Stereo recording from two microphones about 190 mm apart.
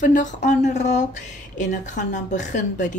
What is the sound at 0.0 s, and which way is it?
Speech, 40° left (ahead or behind).